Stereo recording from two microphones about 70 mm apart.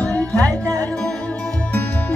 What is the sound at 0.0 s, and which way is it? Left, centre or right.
Music, left.